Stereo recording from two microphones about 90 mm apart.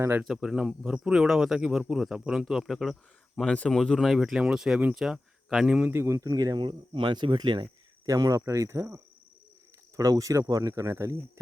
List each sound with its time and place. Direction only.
0.3 s speech: 5° right (ahead or behind)
5.9 s speech: 30° right (ahead or behind)
6.2 s speech: 45° right (ahead or behind)
8.0 s speech: 40° right (ahead or behind)
10.0 s speech: 40° right (ahead or behind)